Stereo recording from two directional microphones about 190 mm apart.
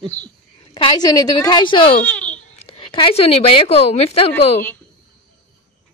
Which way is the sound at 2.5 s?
30° left (ahead or behind).